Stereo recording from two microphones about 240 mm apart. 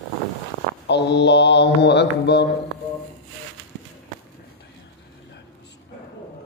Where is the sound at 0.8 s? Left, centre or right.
Left.